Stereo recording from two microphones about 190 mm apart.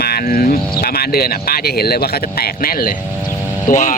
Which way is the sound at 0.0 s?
50° left (ahead or behind).